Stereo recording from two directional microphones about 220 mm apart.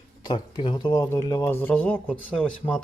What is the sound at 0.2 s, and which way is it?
Speech, 20° left (ahead or behind).